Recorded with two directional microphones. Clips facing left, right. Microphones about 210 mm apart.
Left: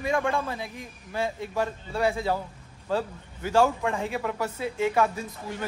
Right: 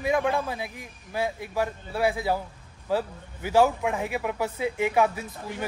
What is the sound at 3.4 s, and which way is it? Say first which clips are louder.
Speech: right 1 dB; 10° right (ahead or behind).